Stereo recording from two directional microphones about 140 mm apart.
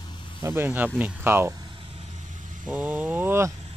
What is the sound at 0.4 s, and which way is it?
Speech, 20° right (ahead or behind).